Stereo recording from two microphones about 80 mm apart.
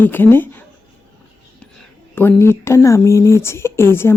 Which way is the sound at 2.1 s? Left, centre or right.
Left.